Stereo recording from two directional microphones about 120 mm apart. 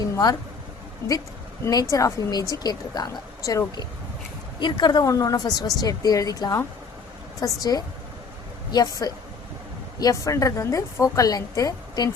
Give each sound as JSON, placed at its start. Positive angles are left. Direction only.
{"t": 0.0, "sound": "a sound", "side_deg": 35}
{"t": 1.6, "sound": "a woman's voice", "side_deg": 30}
{"t": 4.6, "sound": "a woman's voice", "side_deg": 40}